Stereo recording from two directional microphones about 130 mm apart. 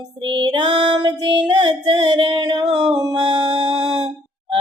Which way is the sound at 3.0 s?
30° right (ahead or behind).